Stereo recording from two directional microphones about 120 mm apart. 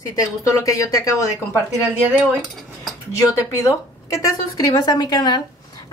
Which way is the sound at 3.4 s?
25° left (ahead or behind).